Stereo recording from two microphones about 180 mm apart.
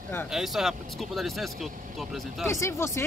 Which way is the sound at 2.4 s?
15° left (ahead or behind).